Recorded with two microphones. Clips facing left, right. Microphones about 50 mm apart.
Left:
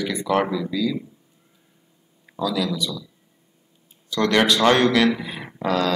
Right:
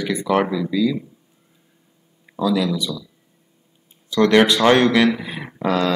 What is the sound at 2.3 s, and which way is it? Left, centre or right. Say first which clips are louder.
Speech: right 4 dB; centre.